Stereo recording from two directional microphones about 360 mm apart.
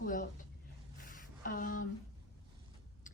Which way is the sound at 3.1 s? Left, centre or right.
Left.